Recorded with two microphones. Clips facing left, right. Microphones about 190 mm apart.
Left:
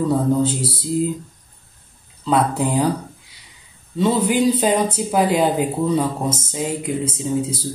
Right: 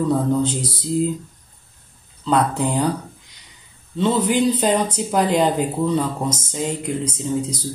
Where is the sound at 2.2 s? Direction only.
5° left (ahead or behind).